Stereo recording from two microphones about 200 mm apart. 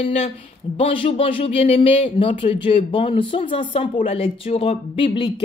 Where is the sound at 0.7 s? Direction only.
25° left (ahead or behind).